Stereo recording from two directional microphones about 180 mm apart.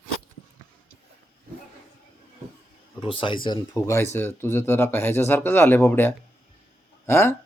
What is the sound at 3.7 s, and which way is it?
Speech, 15° left (ahead or behind).